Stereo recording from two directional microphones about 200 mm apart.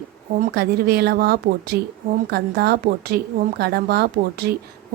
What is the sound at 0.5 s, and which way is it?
A woman's voice, 50° right (ahead or behind).